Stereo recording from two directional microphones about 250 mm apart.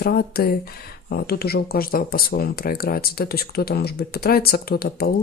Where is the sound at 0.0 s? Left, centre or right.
Left.